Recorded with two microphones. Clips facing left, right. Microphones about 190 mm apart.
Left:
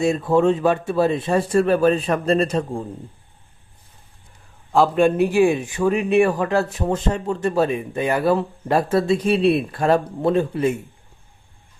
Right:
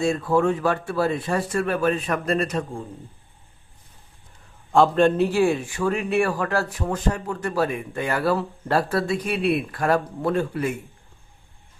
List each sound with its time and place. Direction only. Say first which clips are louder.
0.0 s a man's voice: left 3 dB; 20° left (ahead or behind)
4.7 s a man's voice: left 1 dB; 5° left (ahead or behind); by 10.8 s 25° left (ahead or behind)